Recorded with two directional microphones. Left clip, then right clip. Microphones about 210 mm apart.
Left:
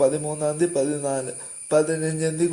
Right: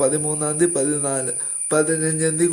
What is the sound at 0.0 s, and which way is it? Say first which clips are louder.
Speech: even; 20° right (ahead or behind).